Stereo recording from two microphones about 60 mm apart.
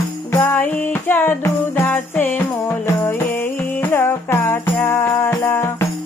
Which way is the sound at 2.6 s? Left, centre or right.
Left.